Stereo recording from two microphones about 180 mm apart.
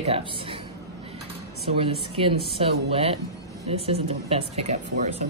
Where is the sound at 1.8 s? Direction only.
30° right (ahead or behind).